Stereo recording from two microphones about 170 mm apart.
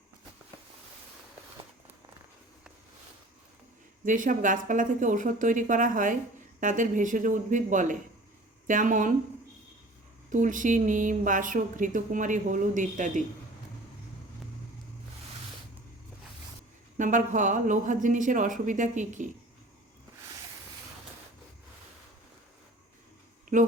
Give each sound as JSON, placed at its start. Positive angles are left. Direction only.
{"t": 4.0, "sound": "speech", "side_deg": -50}
{"t": 10.2, "sound": "speech", "side_deg": -50}
{"t": 17.0, "sound": "speech", "side_deg": -50}